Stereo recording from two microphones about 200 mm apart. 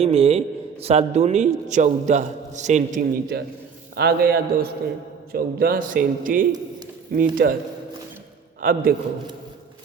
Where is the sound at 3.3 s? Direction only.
55° right (ahead or behind).